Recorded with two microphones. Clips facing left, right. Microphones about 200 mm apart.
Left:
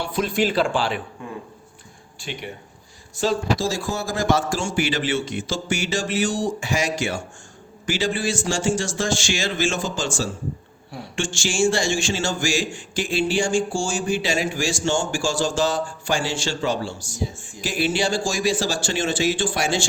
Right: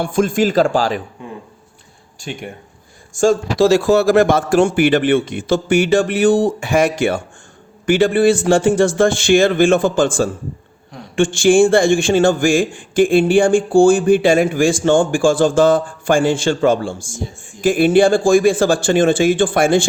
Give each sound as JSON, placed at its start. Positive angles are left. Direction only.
{"t": 0.0, "sound": "a man's voice", "side_deg": -50}
{"t": 2.1, "sound": "a man's voice", "side_deg": -45}
{"t": 3.6, "sound": "a man's voice", "side_deg": -70}